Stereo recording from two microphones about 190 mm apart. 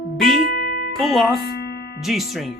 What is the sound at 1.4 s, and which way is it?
Music, 55° left (ahead or behind).